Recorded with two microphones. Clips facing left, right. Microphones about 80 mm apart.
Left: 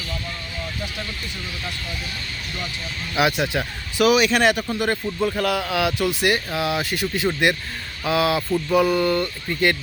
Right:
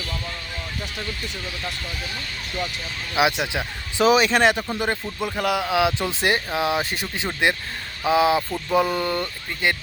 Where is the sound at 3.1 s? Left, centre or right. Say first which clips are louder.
Left 1 dB; centre.